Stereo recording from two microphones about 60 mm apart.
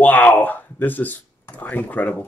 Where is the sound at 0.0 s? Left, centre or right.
Left.